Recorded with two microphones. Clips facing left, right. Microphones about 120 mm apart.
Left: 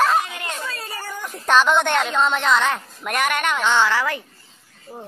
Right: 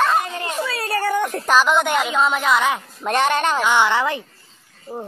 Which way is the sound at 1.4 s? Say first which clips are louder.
Left 2 dB; 5° right (ahead or behind).